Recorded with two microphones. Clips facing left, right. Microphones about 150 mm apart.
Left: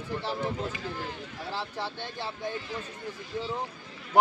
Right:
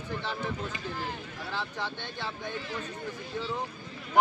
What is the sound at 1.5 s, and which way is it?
Speech, 35° left (ahead or behind).